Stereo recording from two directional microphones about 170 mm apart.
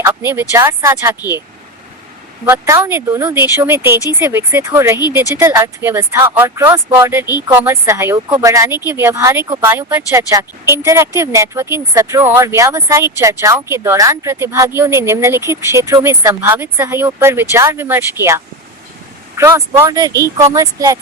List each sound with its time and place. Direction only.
0.3 s speech: 15° right (ahead or behind)
2.4 s speech: 15° right (ahead or behind)